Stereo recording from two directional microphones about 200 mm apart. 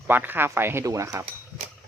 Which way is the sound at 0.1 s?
10° right (ahead or behind).